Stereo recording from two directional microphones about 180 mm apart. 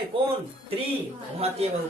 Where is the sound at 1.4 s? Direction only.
35° right (ahead or behind).